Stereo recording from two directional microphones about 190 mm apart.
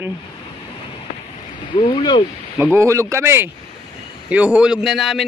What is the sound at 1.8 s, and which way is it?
Speech, 25° left (ahead or behind).